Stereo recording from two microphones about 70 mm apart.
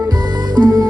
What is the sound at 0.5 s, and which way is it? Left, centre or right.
Music, right.